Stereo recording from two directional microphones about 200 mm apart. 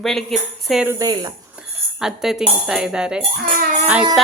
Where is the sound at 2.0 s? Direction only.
Centre (ahead or behind).